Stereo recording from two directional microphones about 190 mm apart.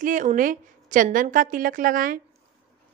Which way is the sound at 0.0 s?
40° right (ahead or behind).